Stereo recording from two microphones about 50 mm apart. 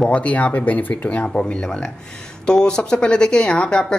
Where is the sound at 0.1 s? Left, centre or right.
Left.